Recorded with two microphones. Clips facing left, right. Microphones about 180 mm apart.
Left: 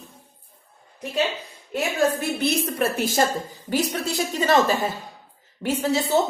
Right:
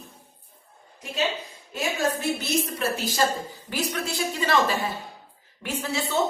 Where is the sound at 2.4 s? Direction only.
55° left (ahead or behind).